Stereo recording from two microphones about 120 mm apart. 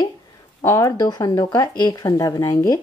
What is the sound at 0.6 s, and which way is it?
Speech, 30° left (ahead or behind).